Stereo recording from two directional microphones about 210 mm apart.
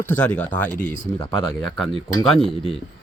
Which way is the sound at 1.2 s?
25° left (ahead or behind).